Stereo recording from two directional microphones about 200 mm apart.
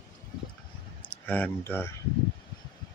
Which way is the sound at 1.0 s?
10° left (ahead or behind).